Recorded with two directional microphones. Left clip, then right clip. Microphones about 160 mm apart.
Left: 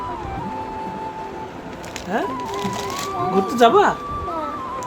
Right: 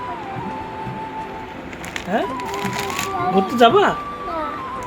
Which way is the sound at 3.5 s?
15° right (ahead or behind).